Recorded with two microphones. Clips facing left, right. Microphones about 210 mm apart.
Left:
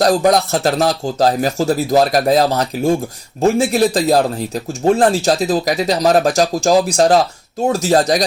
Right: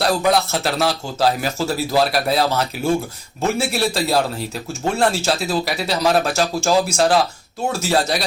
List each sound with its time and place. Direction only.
0.0 s a man's voice: 40° left (ahead or behind)